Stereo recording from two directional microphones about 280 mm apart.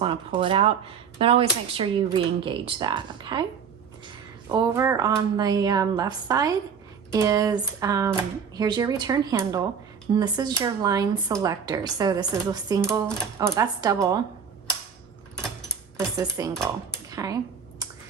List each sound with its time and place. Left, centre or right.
0.0 s speech: centre
4.5 s speech: centre
16.0 s speech: centre
17.1 s a sound: centre